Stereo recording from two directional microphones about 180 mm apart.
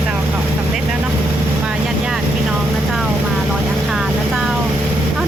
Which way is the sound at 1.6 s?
5° right (ahead or behind).